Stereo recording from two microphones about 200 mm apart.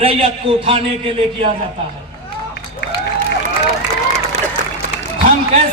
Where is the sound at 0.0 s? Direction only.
30° right (ahead or behind).